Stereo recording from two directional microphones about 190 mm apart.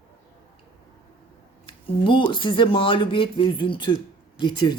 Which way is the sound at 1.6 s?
25° left (ahead or behind).